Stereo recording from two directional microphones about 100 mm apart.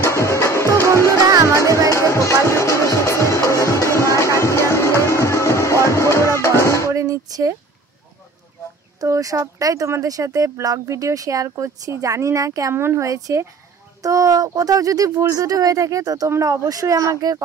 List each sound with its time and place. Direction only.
0.0 s music: 30° left (ahead or behind)
1.1 s music: 30° right (ahead or behind)
1.9 s music: 30° left (ahead or behind)
6.9 s a sound: 35° right (ahead or behind)
9.0 s speech: 35° right (ahead or behind)